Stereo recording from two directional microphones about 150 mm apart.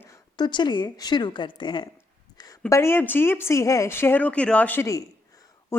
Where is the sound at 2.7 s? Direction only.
15° left (ahead or behind).